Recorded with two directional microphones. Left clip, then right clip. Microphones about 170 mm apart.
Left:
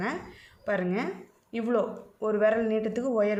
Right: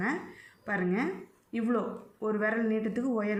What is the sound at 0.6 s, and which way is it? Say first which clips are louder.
Speech: left 2 dB; 35° left (ahead or behind).